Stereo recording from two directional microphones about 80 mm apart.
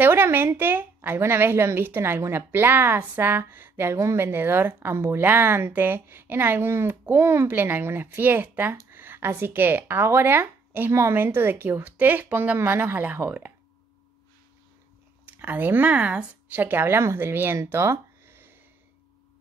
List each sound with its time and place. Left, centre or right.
0.0 s a woman's voice: right
15.2 s a woman's voice: right
17.6 s a sound: right